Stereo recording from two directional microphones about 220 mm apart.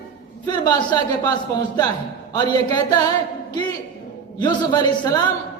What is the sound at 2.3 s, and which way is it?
Speech, 15° left (ahead or behind).